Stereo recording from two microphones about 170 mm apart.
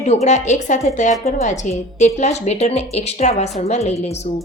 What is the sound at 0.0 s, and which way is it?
A woman's voice, 40° left (ahead or behind).